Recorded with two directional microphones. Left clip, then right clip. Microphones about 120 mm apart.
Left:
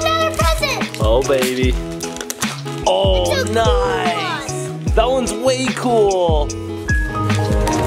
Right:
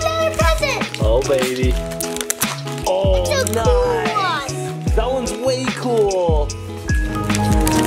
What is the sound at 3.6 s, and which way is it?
Music, 40° left (ahead or behind).